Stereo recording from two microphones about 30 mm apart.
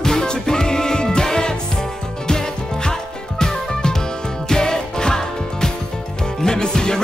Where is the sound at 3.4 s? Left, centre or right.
Left.